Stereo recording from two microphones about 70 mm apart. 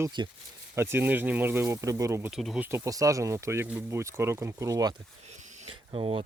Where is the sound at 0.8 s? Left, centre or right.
Right.